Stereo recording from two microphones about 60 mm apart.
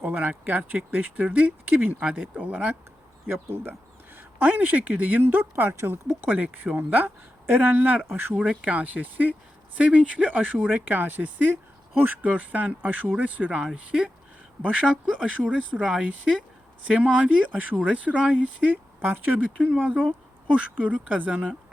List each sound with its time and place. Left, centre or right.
0.0 s speech: right
3.2 s speech: right
8.0 s speech: right
8.4 s speech: right
14.6 s speech: centre